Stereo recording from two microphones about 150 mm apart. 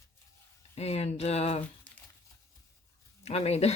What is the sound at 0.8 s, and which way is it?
Speech, 45° left (ahead or behind).